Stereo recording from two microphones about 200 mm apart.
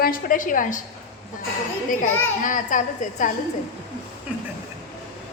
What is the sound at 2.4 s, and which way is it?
Speech, 40° left (ahead or behind).